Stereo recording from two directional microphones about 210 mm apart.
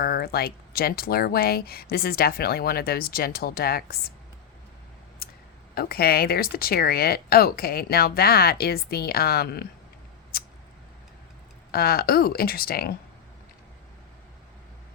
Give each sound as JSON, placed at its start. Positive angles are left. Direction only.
{"t": 0.0, "sound": "speech", "side_deg": 45}
{"t": 5.7, "sound": "speech", "side_deg": 45}
{"t": 10.3, "sound": "mouse", "side_deg": 45}
{"t": 11.7, "sound": "speech", "side_deg": 45}